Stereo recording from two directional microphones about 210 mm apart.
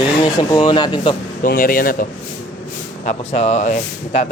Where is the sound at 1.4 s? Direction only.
40° left (ahead or behind).